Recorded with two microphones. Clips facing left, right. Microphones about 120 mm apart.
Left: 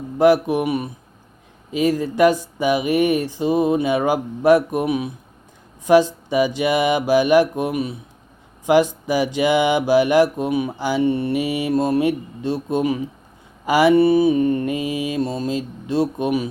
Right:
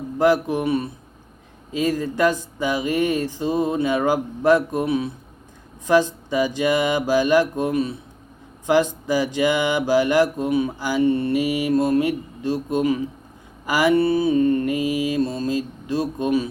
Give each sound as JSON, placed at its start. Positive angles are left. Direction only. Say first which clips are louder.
{"t": 0.2, "sound": "speech", "louder": "left 3 dB", "side_deg": 15}
{"t": 12.6, "sound": "mantra", "louder": "even", "side_deg": 20}